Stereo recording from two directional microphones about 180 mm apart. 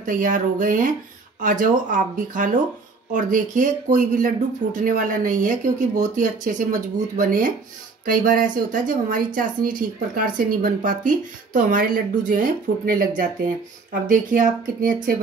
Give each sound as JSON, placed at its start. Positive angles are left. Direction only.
{"t": 0.0, "sound": "speech", "side_deg": -45}
{"t": 14.3, "sound": "speech", "side_deg": -45}